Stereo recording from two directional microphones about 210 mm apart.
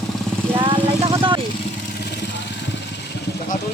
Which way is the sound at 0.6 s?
25° right (ahead or behind).